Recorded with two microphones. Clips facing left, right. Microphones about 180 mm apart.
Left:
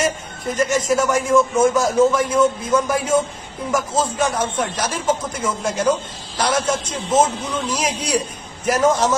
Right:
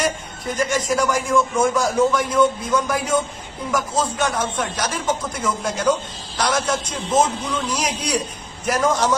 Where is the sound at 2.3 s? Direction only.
5° left (ahead or behind).